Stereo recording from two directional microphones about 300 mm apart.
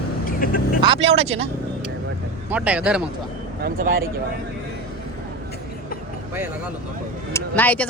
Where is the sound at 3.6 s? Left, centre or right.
Right.